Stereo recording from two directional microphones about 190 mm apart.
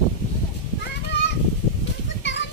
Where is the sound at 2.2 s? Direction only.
70° left (ahead or behind).